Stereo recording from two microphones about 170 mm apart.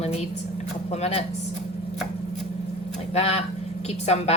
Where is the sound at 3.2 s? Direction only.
40° left (ahead or behind).